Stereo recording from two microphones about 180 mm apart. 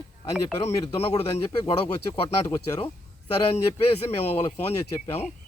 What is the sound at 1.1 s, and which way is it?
Speech, 35° left (ahead or behind).